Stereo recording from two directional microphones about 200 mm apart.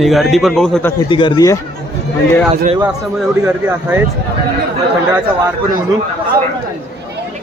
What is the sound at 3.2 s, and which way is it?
Speech, 10° right (ahead or behind).